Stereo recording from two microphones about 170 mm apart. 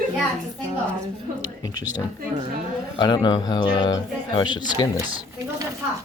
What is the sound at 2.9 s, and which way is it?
Speech, 25° left (ahead or behind).